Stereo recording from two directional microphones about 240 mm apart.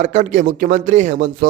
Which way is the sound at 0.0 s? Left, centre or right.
Right.